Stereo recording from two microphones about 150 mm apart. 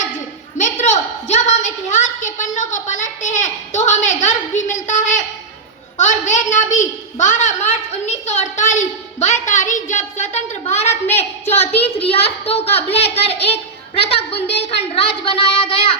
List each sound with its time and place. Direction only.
0.6 s a woman's voice: 50° left (ahead or behind)
15.2 s child singing: 40° left (ahead or behind)